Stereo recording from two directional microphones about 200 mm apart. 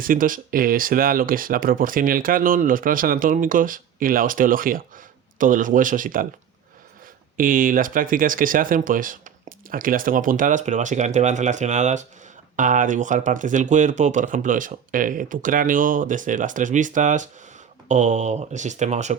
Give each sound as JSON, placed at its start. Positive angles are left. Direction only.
{"t": 0.0, "sound": "speech", "side_deg": -45}
{"t": 7.3, "sound": "speech", "side_deg": -45}